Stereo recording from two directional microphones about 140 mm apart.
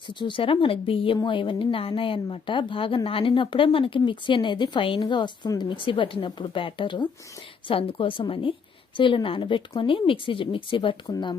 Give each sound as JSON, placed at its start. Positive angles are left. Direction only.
{"t": 0.1, "sound": "a woman's voice", "side_deg": 35}